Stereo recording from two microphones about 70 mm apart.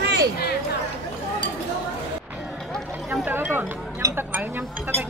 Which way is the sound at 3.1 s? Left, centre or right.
Right.